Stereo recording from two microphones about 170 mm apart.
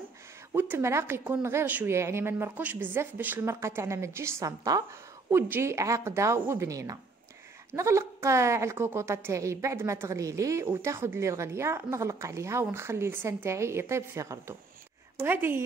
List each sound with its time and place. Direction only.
0.6 s a woman's voice: 15° right (ahead or behind)